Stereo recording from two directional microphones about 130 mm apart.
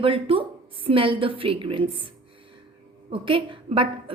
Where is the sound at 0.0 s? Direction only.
45° right (ahead or behind).